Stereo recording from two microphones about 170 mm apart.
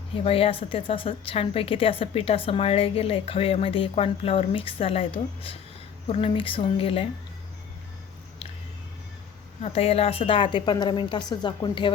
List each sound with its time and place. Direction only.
0.1 s speech: 35° left (ahead or behind)
9.6 s a woman's voice: 35° left (ahead or behind)